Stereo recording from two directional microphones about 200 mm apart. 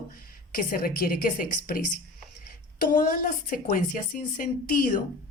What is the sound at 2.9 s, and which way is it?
Speech, 40° left (ahead or behind).